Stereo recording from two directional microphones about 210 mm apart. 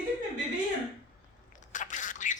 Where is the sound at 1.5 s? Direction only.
35° left (ahead or behind).